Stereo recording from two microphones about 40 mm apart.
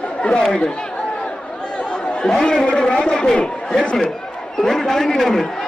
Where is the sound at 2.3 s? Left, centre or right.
Centre.